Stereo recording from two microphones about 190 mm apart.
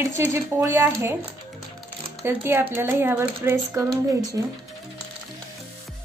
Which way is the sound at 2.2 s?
10° right (ahead or behind).